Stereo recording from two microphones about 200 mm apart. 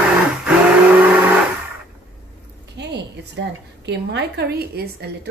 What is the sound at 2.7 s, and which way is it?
A woman's voice, 60° right (ahead or behind).